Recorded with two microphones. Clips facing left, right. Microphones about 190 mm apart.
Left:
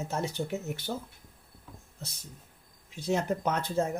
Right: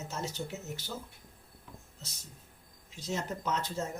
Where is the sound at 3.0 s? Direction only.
60° left (ahead or behind).